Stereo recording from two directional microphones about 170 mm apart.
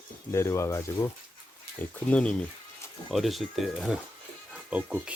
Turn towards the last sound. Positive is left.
turn(degrees=-10)  # may be behind; listen again after turning